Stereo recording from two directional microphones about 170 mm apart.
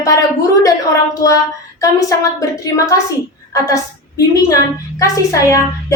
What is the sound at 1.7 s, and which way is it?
A woman's voice, 20° left (ahead or behind).